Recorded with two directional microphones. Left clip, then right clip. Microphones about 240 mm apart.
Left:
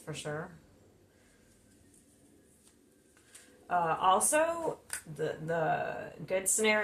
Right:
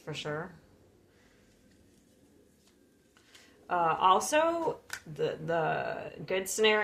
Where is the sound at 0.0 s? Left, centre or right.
Right.